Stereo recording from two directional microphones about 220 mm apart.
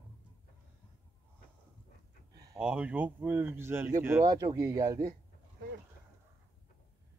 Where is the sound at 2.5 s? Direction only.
5° right (ahead or behind).